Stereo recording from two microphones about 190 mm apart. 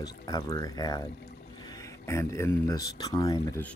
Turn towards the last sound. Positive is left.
turn(degrees=20)  # may be behind; listen again after turning